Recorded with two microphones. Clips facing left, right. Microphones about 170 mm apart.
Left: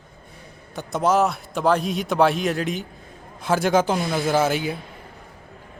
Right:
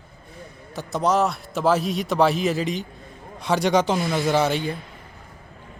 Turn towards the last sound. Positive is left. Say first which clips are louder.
# even
turn(degrees=5)  # may be behind; listen again after turning